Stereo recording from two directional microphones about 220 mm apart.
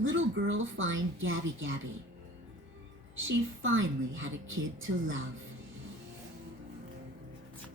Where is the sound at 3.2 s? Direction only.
65° right (ahead or behind).